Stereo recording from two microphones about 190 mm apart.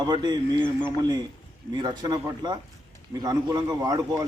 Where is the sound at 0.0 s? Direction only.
20° right (ahead or behind).